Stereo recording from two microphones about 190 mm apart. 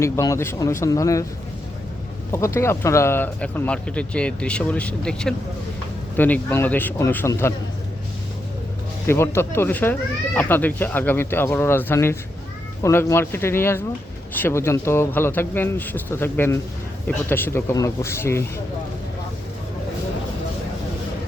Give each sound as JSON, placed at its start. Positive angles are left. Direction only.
{"t": 0.0, "sound": "speech", "side_deg": 15}
{"t": 2.3, "sound": "speech", "side_deg": 15}
{"t": 9.0, "sound": "speech", "side_deg": 15}